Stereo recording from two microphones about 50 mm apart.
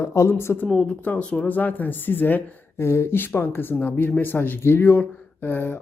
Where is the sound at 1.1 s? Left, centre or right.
Left.